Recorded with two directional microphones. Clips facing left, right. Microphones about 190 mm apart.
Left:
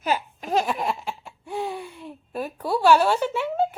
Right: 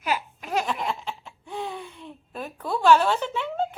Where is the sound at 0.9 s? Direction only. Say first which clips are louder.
Left 2 dB; 10° left (ahead or behind).